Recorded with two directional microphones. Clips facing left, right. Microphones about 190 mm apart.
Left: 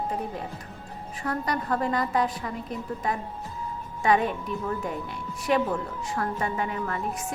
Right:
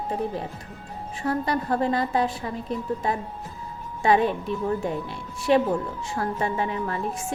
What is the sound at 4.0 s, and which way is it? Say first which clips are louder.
A woman's voice: right 3 dB; 30° right (ahead or behind).